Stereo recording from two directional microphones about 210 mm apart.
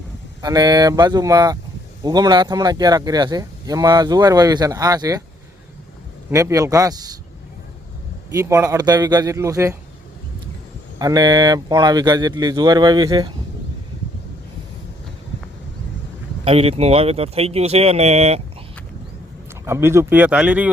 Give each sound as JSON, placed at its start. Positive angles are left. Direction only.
{"t": 0.4, "sound": "speech", "side_deg": -20}
{"t": 6.3, "sound": "speech", "side_deg": -15}
{"t": 8.3, "sound": "speech", "side_deg": -15}
{"t": 10.9, "sound": "speech", "side_deg": -15}
{"t": 16.4, "sound": "speech", "side_deg": -30}
{"t": 19.6, "sound": "speech", "side_deg": -10}